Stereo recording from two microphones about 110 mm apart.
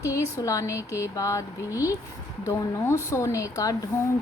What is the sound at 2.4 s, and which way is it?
Speech, 25° left (ahead or behind).